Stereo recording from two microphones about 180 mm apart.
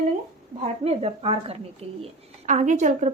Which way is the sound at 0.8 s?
35° right (ahead or behind).